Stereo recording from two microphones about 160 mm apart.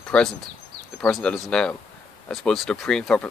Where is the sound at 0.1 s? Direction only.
5° left (ahead or behind).